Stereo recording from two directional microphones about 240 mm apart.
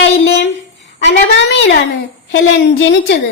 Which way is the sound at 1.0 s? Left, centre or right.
Left.